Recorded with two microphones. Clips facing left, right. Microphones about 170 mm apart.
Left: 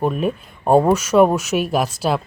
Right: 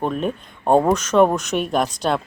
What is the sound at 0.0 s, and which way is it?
Speech, 5° left (ahead or behind).